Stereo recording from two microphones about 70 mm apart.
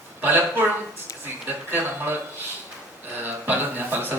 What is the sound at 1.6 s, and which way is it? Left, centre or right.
Speech, right.